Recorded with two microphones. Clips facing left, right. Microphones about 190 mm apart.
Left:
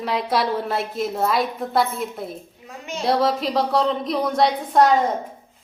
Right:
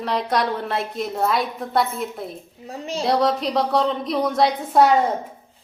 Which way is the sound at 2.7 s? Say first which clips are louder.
Right 4 dB; 35° right (ahead or behind).